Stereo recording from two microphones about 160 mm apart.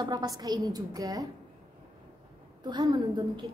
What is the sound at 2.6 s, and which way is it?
Speech, 25° right (ahead or behind).